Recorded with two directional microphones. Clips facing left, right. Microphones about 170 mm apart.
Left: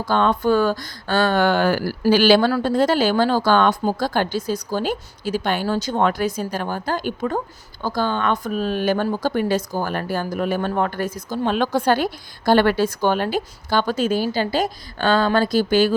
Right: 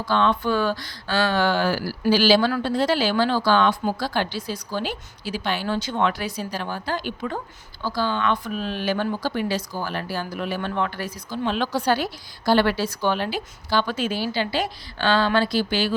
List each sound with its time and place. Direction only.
0.0 s speech: 45° left (ahead or behind)
2.5 s speech: 45° left (ahead or behind)